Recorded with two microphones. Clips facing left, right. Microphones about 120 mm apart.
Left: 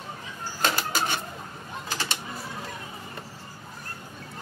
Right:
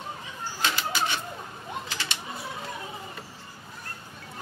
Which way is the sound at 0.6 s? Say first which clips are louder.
Left 2 dB; 45° left (ahead or behind).